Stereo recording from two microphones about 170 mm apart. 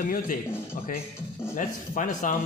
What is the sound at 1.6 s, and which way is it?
Speech, 50° left (ahead or behind).